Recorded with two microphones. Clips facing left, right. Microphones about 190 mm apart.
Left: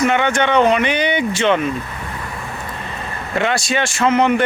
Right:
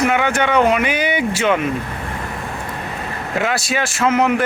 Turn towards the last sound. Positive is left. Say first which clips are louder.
# left 1 dB
turn(degrees=-5)  # may be behind; listen again after turning